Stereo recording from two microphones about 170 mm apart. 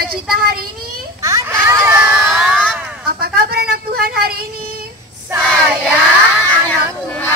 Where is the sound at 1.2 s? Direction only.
15° right (ahead or behind).